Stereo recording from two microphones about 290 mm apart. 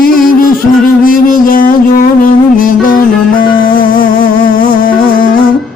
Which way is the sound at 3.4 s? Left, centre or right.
Left.